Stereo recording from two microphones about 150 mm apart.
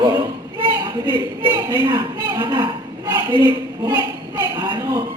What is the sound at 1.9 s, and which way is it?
A woman's voice, 30° right (ahead or behind).